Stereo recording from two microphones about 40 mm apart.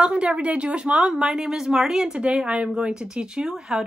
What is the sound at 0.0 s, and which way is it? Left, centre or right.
Speech, right.